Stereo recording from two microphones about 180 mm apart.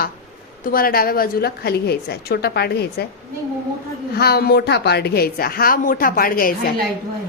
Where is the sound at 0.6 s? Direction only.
50° left (ahead or behind).